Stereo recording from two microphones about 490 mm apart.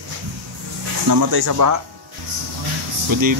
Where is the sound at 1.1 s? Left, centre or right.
Right.